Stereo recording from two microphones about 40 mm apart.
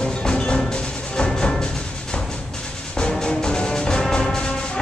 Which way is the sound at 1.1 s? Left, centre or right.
Left.